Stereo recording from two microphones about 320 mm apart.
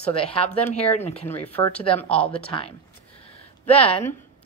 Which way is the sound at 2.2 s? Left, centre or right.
Centre.